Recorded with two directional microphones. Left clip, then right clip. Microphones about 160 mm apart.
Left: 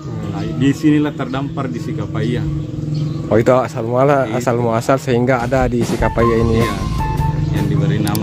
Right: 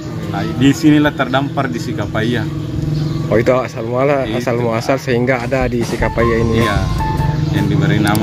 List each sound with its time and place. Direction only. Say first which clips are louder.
0.6 s speech: right 3 dB; 10° right (ahead or behind)
3.3 s speech: left 1 dB; 30° left (ahead or behind)